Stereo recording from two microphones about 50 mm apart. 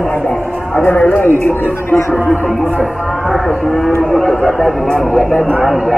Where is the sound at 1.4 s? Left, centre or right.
Left.